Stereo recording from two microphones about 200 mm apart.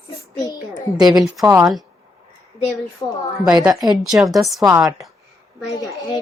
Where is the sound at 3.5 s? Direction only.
5° right (ahead or behind).